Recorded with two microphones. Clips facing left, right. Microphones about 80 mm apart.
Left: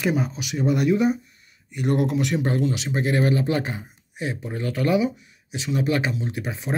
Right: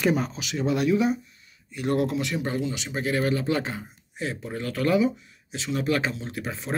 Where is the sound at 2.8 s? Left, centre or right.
Left.